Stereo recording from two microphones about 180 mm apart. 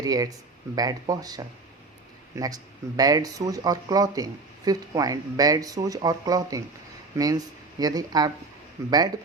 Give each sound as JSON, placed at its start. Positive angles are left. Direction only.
{"t": 0.0, "sound": "speech", "side_deg": -20}